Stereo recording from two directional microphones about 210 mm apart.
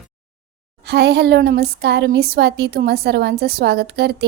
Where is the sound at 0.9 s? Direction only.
50° right (ahead or behind).